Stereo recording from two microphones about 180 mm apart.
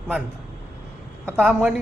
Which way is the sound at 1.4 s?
5° right (ahead or behind).